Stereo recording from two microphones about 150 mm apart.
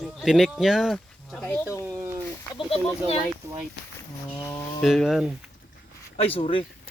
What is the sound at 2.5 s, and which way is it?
Speech, 35° left (ahead or behind).